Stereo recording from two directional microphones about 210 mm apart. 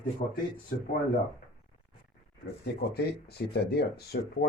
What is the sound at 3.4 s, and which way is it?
Speech, 45° left (ahead or behind).